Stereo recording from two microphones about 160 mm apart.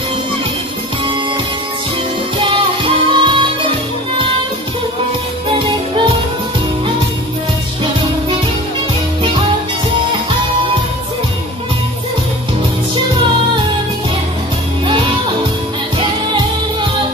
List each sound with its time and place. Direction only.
2.8 s music: 30° right (ahead or behind)